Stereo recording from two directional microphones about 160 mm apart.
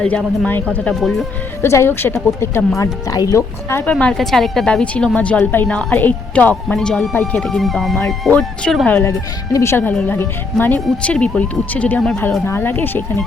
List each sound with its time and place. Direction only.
0.0 s a woman's voice: 5° left (ahead or behind)
1.6 s a woman's voice: 15° left (ahead or behind)
3.9 s a woman's voice: 5° left (ahead or behind)